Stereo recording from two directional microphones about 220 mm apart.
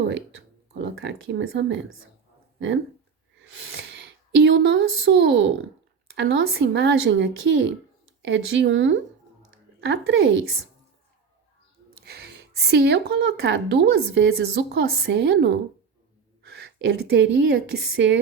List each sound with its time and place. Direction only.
0.8 s speech: 55° right (ahead or behind)
3.5 s speech: 60° right (ahead or behind)
12.0 s a woman's voice: 45° right (ahead or behind)